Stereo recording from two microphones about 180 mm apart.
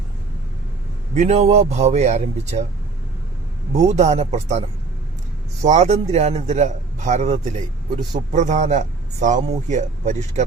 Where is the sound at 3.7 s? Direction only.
40° right (ahead or behind).